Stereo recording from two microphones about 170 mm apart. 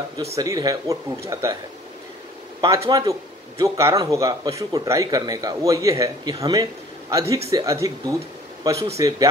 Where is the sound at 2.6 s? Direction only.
20° right (ahead or behind).